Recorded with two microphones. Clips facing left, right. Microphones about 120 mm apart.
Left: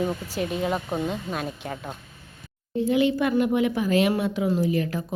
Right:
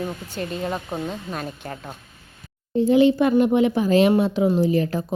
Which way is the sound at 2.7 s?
30° right (ahead or behind).